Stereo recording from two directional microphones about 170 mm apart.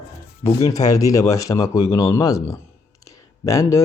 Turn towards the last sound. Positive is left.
turn(degrees=15)  # may be behind; listen again after turning